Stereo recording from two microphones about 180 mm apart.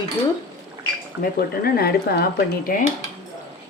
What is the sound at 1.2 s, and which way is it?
Speech, 55° left (ahead or behind).